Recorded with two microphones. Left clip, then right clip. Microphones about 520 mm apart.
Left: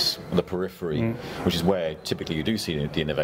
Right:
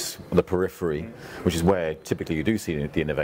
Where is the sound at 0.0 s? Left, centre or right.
Right.